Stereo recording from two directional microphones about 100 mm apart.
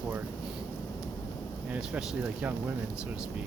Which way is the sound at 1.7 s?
10° right (ahead or behind).